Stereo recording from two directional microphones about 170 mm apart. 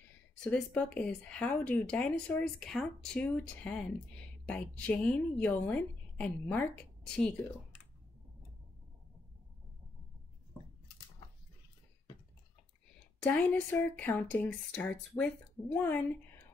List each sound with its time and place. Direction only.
0.4 s a woman's voice: 10° left (ahead or behind)
13.2 s a woman's voice: 10° left (ahead or behind)